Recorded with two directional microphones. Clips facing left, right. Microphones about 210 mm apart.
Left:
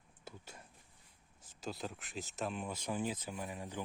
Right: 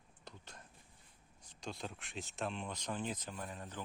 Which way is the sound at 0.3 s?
10° left (ahead or behind).